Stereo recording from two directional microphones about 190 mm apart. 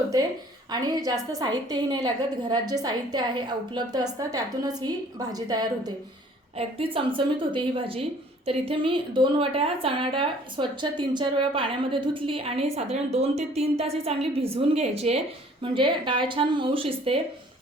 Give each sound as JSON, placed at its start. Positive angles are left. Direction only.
{"t": 0.7, "sound": "a woman's voice", "side_deg": -20}